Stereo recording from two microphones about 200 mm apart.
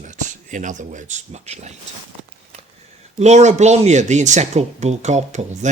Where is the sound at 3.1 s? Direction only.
35° right (ahead or behind).